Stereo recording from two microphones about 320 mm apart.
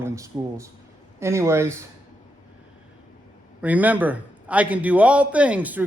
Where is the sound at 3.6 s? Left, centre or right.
Centre.